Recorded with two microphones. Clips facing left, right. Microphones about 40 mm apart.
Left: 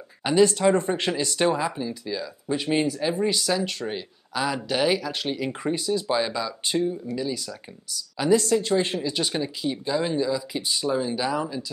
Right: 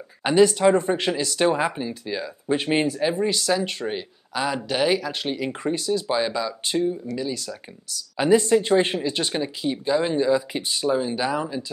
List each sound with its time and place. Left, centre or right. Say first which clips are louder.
0.2 s speech: right 2 dB; centre
1.4 s speech: right 2 dB; centre
1.8 s speech: right 1 dB; right
2.9 s speech: right 2 dB; centre
3.3 s speech: right 1 dB; centre
3.5 s speech: right 2 dB; centre
5.6 s speech: right 2 dB; centre
8.2 s speech: right 3 dB; right
9.2 s speech: right 1 dB; centre
10.7 s speech: right 2 dB; centre